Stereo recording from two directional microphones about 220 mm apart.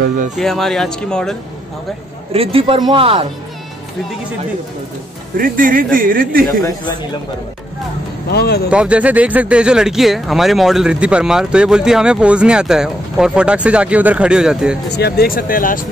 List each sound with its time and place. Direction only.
0.4 s speech: centre (ahead or behind)
2.3 s speech: 25° right (ahead or behind)
5.4 s speech: 40° right (ahead or behind)
8.3 s speech: 45° left (ahead or behind)
8.6 s speech: 5° right (ahead or behind)
14.9 s speech: 45° left (ahead or behind)